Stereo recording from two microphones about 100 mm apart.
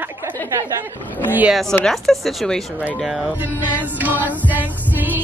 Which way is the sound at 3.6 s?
15° right (ahead or behind).